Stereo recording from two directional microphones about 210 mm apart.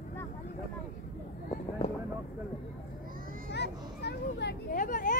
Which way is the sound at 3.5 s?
50° left (ahead or behind).